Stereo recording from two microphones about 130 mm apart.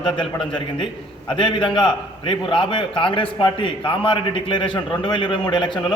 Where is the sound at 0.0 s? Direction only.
40° left (ahead or behind).